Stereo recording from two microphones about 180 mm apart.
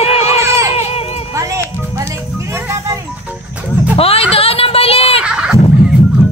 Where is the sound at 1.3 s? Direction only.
15° right (ahead or behind).